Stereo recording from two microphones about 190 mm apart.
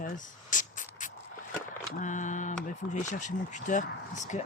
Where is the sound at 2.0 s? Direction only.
40° left (ahead or behind).